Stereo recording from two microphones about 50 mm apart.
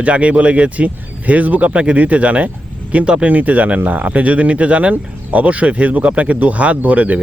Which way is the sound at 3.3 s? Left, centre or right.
Right.